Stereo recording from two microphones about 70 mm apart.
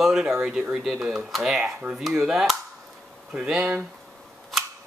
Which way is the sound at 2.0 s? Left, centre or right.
Centre.